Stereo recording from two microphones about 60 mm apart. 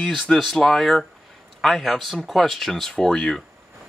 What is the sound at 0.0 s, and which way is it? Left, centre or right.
Speech, centre.